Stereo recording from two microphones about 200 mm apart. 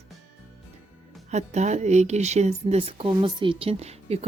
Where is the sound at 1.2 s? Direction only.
35° right (ahead or behind).